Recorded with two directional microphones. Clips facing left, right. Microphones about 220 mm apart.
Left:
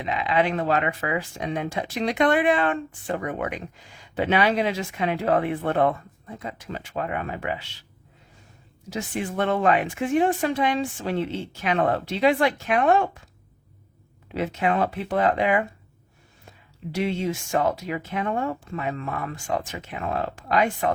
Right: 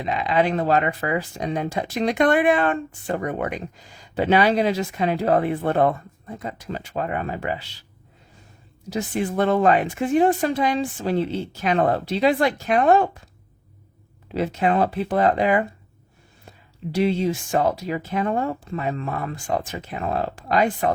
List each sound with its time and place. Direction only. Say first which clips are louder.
0.0 s speech: right 2 dB; 40° right (ahead or behind)
8.9 s speech: right 4 dB; 35° right (ahead or behind)
14.3 s speech: right 3 dB; 35° right (ahead or behind)